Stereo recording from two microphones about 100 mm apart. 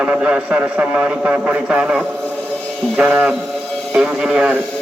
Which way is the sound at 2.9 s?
15° right (ahead or behind).